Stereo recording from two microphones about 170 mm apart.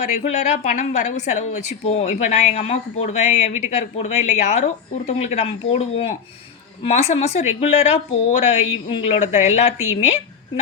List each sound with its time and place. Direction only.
0.3 s a woman's voice: 45° left (ahead or behind)